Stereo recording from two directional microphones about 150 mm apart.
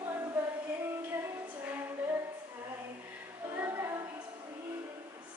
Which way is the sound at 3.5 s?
15° right (ahead or behind).